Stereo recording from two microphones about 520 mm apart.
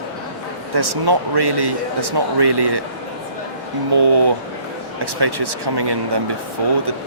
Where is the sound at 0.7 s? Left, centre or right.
Right.